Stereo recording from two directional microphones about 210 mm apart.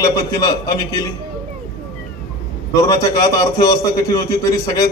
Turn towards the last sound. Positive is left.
turn(degrees=15)  # may be behind; listen again after turning